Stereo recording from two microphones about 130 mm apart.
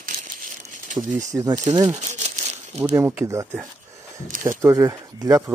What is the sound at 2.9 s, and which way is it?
Speech, 20° right (ahead or behind).